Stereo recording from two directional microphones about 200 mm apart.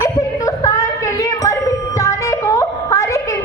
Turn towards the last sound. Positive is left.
turn(degrees=15)  # may be behind; listen again after turning